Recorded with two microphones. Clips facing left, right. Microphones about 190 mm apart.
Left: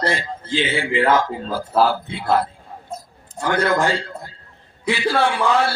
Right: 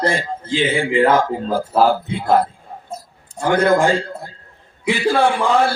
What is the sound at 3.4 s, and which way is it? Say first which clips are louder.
Speech: right 4 dB; 50° right (ahead or behind).